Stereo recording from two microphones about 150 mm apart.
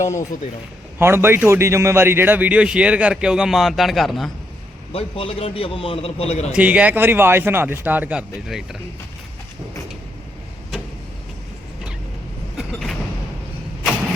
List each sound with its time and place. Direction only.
0.9 s a man's voice: 15° right (ahead or behind); by 4.3 s centre (ahead or behind)
4.9 s a man's voice: 40° left (ahead or behind)
6.5 s a man's voice: 10° right (ahead or behind)
12.5 s creak: centre (ahead or behind)